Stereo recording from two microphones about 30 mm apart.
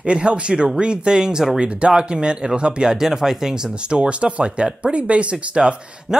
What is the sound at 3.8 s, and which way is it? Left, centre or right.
Speech, right.